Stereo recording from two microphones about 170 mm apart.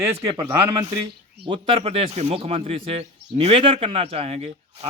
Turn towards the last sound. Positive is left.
turn(degrees=-40)  # may be behind; listen again after turning